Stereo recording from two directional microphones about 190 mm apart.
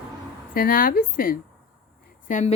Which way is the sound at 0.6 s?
50° left (ahead or behind).